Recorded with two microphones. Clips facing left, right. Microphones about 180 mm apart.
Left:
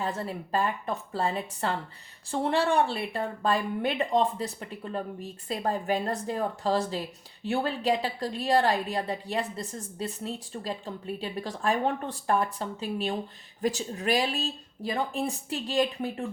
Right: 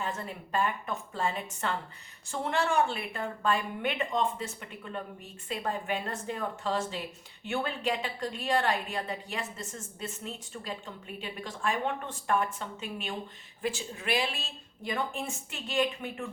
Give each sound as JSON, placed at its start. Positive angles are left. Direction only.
{"t": 0.0, "sound": "a woman's voice", "side_deg": 35}